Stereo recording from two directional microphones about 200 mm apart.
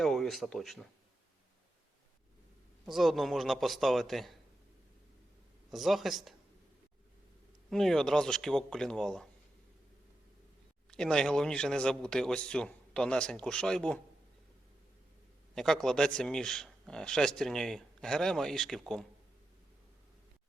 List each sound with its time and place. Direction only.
0.0 s speech: centre (ahead or behind)
2.8 s speech: centre (ahead or behind)
5.7 s speech: centre (ahead or behind)
7.7 s speech: centre (ahead or behind)
10.9 s speech: 5° left (ahead or behind)
15.5 s speech: centre (ahead or behind)